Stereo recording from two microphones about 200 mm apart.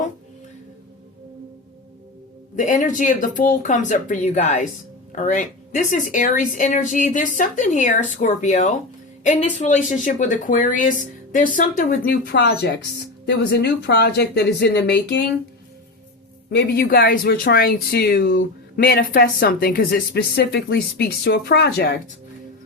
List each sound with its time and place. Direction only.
2.6 s speech: 40° left (ahead or behind); by 15.2 s 55° left (ahead or behind)
16.5 s speech: 50° left (ahead or behind)